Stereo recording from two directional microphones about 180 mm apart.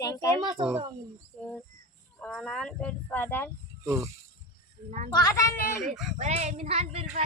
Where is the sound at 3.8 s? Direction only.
15° right (ahead or behind).